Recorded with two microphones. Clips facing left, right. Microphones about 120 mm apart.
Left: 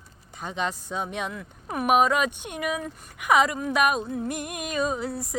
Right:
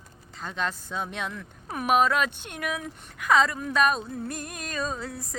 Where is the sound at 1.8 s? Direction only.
10° left (ahead or behind).